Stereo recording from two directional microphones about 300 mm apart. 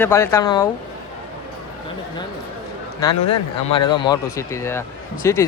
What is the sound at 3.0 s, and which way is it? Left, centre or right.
A man's voice, centre.